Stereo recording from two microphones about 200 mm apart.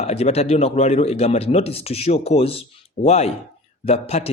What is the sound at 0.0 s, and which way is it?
Speech, 30° left (ahead or behind).